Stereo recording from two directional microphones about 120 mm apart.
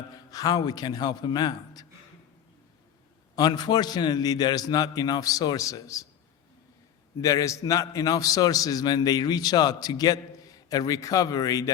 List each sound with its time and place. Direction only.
0.1 s a man's voice: 30° left (ahead or behind)
3.3 s a man's voice: 35° left (ahead or behind)
7.2 s a man's voice: 30° left (ahead or behind)